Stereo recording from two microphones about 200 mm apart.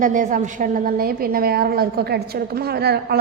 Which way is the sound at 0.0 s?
40° right (ahead or behind).